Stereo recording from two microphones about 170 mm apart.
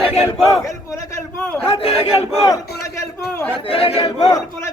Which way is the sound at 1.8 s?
35° left (ahead or behind).